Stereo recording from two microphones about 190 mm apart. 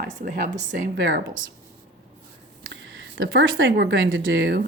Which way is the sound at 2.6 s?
90° right.